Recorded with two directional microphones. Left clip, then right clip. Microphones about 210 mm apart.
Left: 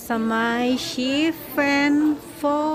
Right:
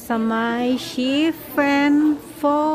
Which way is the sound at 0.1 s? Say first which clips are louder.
Right 1 dB; 10° right (ahead or behind).